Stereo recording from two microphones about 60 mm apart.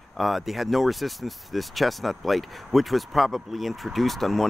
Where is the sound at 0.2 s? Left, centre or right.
Centre.